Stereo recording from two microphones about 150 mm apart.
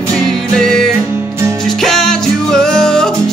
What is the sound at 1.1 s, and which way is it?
Music, 20° right (ahead or behind).